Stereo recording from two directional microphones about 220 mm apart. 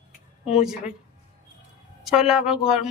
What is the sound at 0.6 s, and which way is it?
Speech, 5° right (ahead or behind).